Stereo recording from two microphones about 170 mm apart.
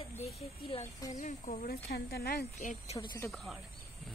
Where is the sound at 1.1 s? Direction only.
50° left (ahead or behind).